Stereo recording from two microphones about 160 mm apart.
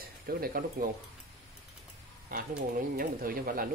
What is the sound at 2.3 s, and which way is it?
Speech, 60° right (ahead or behind).